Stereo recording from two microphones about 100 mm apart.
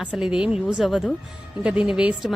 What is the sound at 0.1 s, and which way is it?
A woman's voice, 5° right (ahead or behind).